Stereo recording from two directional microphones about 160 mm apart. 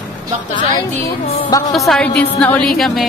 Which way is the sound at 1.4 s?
20° left (ahead or behind).